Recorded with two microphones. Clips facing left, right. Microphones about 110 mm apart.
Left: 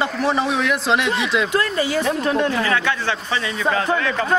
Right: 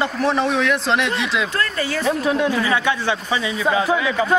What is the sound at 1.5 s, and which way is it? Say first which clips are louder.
Speech: left 3 dB; 15° left (ahead or behind).